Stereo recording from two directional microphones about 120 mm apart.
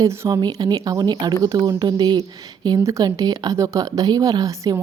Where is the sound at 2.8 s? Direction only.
25° right (ahead or behind).